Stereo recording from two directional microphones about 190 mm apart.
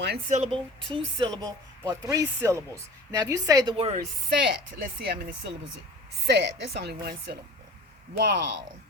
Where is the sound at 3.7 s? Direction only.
30° right (ahead or behind).